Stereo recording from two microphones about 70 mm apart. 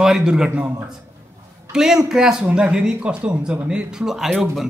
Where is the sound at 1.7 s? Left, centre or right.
Centre.